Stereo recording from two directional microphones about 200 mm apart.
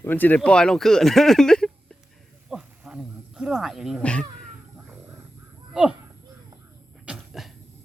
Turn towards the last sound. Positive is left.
turn(degrees=0)  # may be behind; listen again after turning